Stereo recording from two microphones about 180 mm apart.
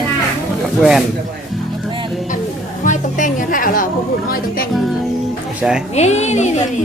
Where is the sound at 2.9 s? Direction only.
45° left (ahead or behind).